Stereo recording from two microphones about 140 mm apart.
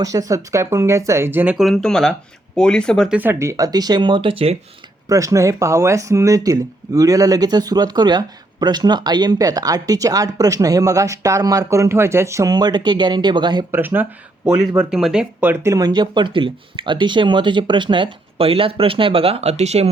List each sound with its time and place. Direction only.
0.0 s speech: 25° right (ahead or behind)
1.5 s speech: centre (ahead or behind)
3.1 s speech: 15° right (ahead or behind); by 4.5 s 40° right (ahead or behind)
5.0 s speech: 25° right (ahead or behind)
13.7 s speech: 15° right (ahead or behind)
14.8 s speech: 5° right (ahead or behind); by 19.9 s 50° right (ahead or behind)